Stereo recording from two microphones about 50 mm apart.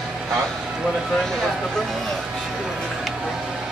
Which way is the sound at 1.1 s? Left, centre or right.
Centre.